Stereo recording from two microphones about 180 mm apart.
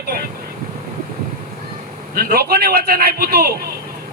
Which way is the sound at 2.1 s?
55° right (ahead or behind).